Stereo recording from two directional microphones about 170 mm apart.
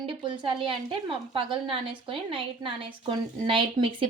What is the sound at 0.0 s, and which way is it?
A woman's voice, 30° right (ahead or behind).